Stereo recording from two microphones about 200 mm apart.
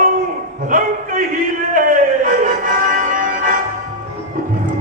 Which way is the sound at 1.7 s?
40° right (ahead or behind).